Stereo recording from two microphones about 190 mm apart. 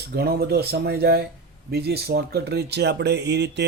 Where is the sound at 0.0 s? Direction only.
55° right (ahead or behind).